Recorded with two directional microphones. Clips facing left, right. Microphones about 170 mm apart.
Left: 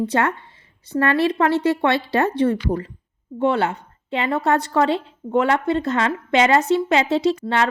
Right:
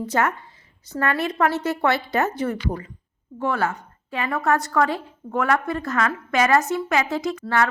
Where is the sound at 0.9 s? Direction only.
30° left (ahead or behind).